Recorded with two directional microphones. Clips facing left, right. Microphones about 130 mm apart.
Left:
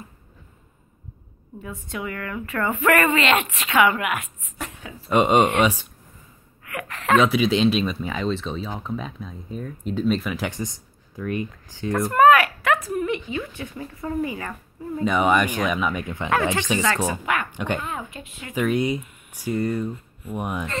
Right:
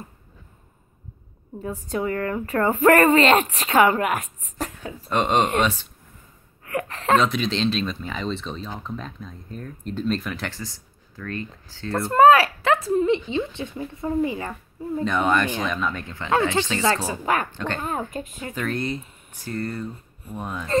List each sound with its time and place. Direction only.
1.9 s speech: 35° right (ahead or behind)
5.1 s speech: 10° left (ahead or behind)
6.6 s a sound: 35° right (ahead or behind)
7.2 s speech: 10° left (ahead or behind)
12.1 s a woman's voice: 25° right (ahead or behind)
15.0 s speech: 10° left (ahead or behind)
17.1 s speech: 35° right (ahead or behind)
17.5 s speech: 15° left (ahead or behind)
17.7 s speech: 40° right (ahead or behind)
18.5 s speech: 10° left (ahead or behind)